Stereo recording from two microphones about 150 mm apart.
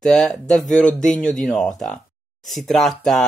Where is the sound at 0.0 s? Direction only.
Centre (ahead or behind).